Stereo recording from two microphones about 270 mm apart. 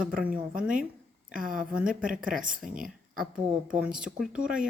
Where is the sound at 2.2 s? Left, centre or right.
Right.